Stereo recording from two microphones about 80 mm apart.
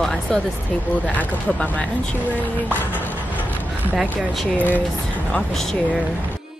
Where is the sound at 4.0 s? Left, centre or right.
Centre.